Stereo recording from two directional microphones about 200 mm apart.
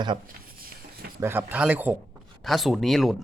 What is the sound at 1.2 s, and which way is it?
Speech, 10° right (ahead or behind).